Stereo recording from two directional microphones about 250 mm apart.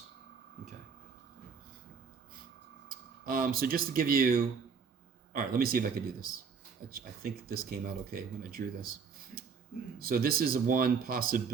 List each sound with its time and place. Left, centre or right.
3.2 s speech: right
10.0 s speech: right